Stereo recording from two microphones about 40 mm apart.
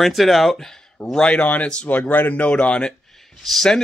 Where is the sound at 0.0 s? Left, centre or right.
Centre.